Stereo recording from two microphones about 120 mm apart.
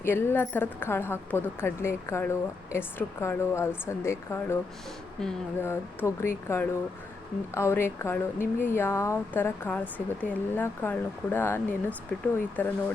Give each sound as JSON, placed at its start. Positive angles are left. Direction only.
{"t": 0.0, "sound": "a woman's voice", "side_deg": 20}
{"t": 5.6, "sound": "a woman's voice", "side_deg": 20}